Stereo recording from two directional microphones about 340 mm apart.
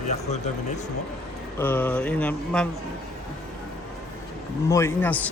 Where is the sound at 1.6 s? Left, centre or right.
Centre.